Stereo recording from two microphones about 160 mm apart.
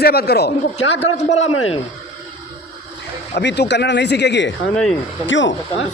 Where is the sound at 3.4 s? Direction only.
90° left.